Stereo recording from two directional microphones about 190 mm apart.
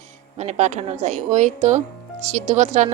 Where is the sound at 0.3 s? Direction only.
35° right (ahead or behind).